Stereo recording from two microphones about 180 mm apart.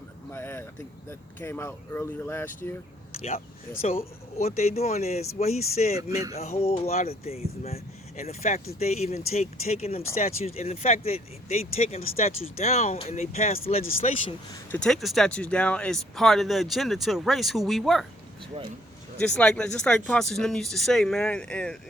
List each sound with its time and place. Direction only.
0.3 s speech: 15° left (ahead or behind)
4.4 s speech: 35° left (ahead or behind)
14.7 s speech: 5° left (ahead or behind)
19.2 s speech: 5° left (ahead or behind)